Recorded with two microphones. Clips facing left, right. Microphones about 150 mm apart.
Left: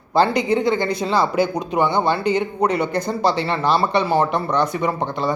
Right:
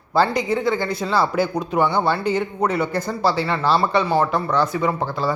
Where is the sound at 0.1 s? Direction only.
20° left (ahead or behind).